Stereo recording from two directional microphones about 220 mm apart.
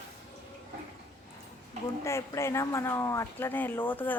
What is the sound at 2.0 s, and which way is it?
Speech, 15° left (ahead or behind).